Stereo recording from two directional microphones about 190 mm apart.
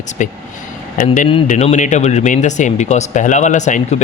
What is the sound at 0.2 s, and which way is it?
Speech, 40° left (ahead or behind).